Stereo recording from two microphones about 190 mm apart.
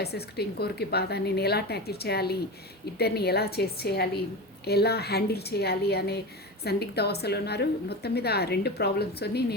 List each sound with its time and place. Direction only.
0.0 s a woman's voice: 55° left (ahead or behind)